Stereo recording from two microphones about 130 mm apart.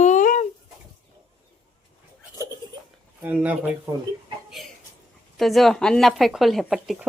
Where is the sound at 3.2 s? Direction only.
10° right (ahead or behind).